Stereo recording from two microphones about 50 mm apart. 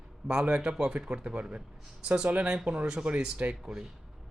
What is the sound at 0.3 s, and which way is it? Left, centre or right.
Speech, centre.